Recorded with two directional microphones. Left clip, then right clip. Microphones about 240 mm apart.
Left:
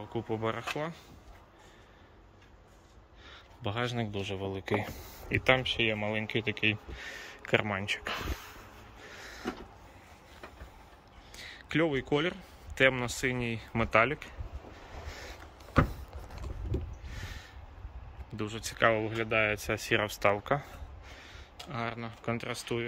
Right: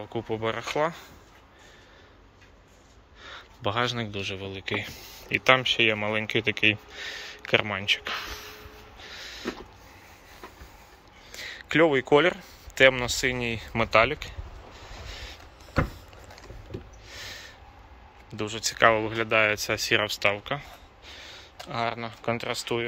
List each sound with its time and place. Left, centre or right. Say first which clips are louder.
0.0 s speech: right 4 dB; centre
3.3 s speech: right 8 dB; centre
9.0 s a sound: right 6 dB; centre
11.3 s speech: right 8 dB; centre
17.1 s a sound: right 7 dB; centre
18.3 s speech: right 7 dB; centre
21.1 s speech: right 8 dB; centre